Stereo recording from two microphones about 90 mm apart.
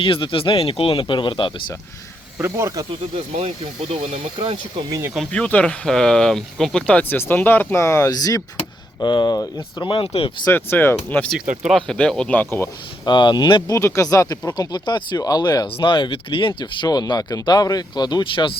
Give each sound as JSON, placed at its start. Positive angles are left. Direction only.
{"t": 0.0, "sound": "speech", "side_deg": 75}
{"t": 2.4, "sound": "speech", "side_deg": -30}
{"t": 3.6, "sound": "speech", "side_deg": -90}
{"t": 5.3, "sound": "speech", "side_deg": 15}
{"t": 8.1, "sound": "speech", "side_deg": 45}
{"t": 9.0, "sound": "speech", "side_deg": 55}
{"t": 9.8, "sound": "speech", "side_deg": 85}
{"t": 10.5, "sound": "speech", "side_deg": 25}
{"t": 11.7, "sound": "speech", "side_deg": 5}
{"t": 12.3, "sound": "speech", "side_deg": 20}
{"t": 13.1, "sound": "speech", "side_deg": 55}
{"t": 15.6, "sound": "speech", "side_deg": 70}
{"t": 16.6, "sound": "speech", "side_deg": 55}